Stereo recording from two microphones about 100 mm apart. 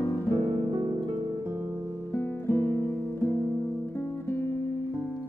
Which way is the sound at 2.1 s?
25° left (ahead or behind).